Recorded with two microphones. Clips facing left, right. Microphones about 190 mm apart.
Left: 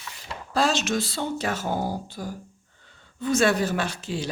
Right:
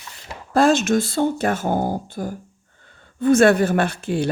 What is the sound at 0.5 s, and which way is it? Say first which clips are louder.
Speech: right 8 dB; 50° right (ahead or behind).